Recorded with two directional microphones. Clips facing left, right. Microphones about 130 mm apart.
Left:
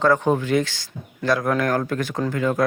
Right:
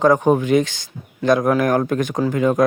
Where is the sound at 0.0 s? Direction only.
15° right (ahead or behind).